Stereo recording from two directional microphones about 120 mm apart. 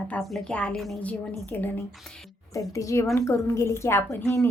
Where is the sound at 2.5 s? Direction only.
25° left (ahead or behind).